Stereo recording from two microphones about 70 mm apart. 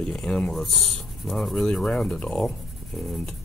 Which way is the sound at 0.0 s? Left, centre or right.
Centre.